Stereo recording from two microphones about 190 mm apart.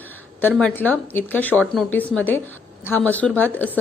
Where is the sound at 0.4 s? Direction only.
5° left (ahead or behind).